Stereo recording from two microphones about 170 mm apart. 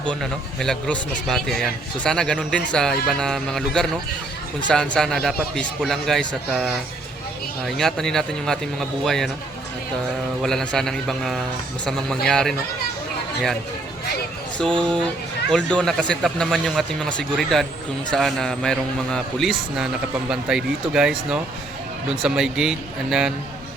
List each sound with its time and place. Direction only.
0.1 s speech: 5° left (ahead or behind)
10.4 s speech: 5° left (ahead or behind)
15.4 s speech: 5° left (ahead or behind)